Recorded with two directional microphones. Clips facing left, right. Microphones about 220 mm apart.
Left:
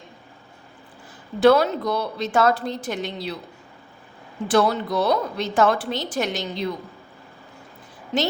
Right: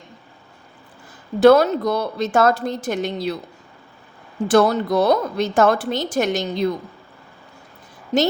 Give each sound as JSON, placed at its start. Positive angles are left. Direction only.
{"t": 1.4, "sound": "a woman's voice", "side_deg": -45}
{"t": 4.4, "sound": "a woman's voice", "side_deg": -45}
{"t": 8.1, "sound": "a woman's voice", "side_deg": -40}